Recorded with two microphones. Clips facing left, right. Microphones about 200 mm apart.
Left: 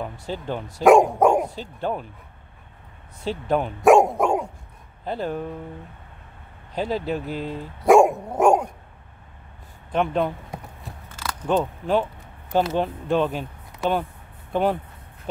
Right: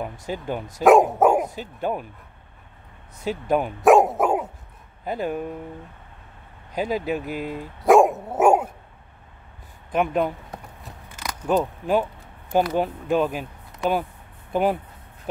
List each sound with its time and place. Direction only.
0.3 s speech: 10° right (ahead or behind)
3.3 s speech: 10° right (ahead or behind)
6.7 s speech: 10° right (ahead or behind)
7.8 s dog: centre (ahead or behind)
9.9 s speech: 5° right (ahead or behind)
11.1 s a sound: 15° right (ahead or behind)
11.4 s speech: 10° right (ahead or behind)